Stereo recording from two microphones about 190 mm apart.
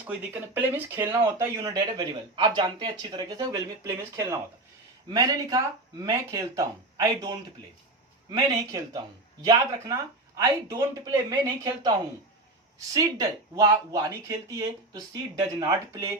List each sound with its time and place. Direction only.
0.0 s speech: 10° right (ahead or behind)